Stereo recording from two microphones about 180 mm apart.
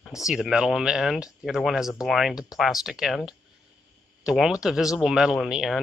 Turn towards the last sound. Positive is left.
turn(degrees=0)  # may be behind; listen again after turning